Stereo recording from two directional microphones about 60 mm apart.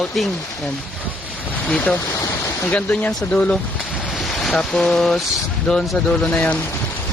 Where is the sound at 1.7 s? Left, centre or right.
Left; by 5.8 s centre.